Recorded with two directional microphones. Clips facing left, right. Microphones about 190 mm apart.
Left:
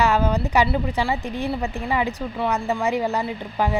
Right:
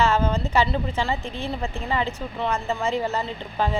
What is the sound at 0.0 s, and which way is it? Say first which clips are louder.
A woman's voice: left 2 dB; 15° left (ahead or behind).